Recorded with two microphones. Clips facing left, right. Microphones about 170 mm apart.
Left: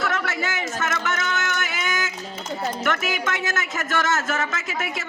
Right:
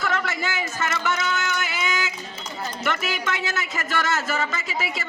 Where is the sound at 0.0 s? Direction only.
Centre (ahead or behind).